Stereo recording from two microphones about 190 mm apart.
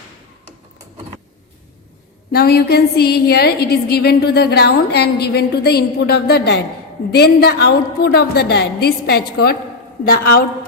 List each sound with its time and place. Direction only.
2.3 s a woman's voice: 55° left (ahead or behind)